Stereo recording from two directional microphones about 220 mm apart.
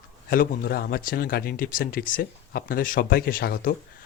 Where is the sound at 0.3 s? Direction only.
40° left (ahead or behind).